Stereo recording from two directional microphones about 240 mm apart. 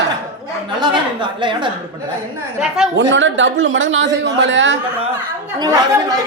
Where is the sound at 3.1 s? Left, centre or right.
Right.